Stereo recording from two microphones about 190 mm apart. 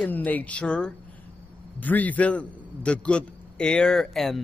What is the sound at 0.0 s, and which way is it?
A man's voice, 10° left (ahead or behind).